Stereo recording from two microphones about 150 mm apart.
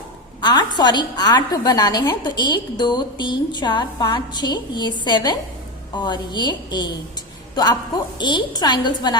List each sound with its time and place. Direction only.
0.4 s a woman's voice: 30° left (ahead or behind)